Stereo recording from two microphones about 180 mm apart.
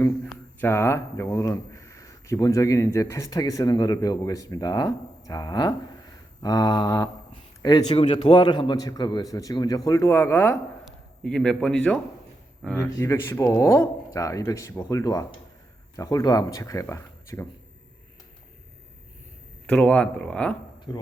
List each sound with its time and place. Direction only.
0.6 s speech: 15° left (ahead or behind)
19.6 s speech: 5° left (ahead or behind)